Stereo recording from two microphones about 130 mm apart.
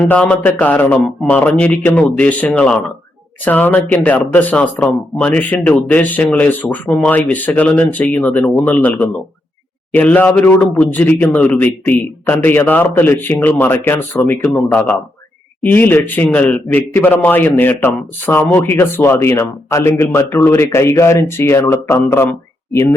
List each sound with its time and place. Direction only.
0.0 s a man's voice: 10° left (ahead or behind)